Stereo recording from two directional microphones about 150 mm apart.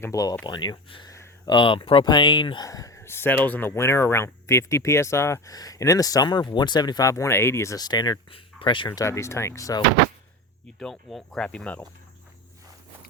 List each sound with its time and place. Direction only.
0.0 s speech: 20° left (ahead or behind)
1.1 s a sound: 20° left (ahead or behind)
1.5 s speech: 35° left (ahead or behind)
8.9 s speech: 20° left (ahead or behind)
10.8 s cricket: 5° left (ahead or behind)